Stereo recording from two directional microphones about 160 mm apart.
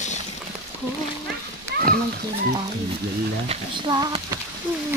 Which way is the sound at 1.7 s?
90° right.